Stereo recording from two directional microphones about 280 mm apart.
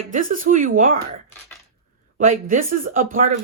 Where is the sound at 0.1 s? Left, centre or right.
Right.